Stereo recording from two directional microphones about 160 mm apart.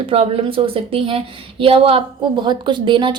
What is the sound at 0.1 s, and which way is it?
A woman's voice, 35° right (ahead or behind).